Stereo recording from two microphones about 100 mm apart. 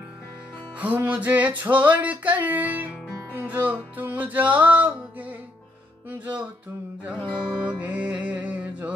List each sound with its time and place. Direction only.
0.7 s music: 15° right (ahead or behind)